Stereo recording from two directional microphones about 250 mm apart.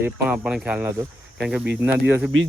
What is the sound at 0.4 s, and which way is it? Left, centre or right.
Speech, centre.